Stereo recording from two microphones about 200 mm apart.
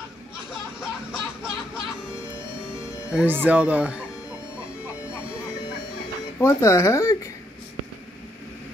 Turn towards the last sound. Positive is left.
turn(degrees=15)  # may be behind; listen again after turning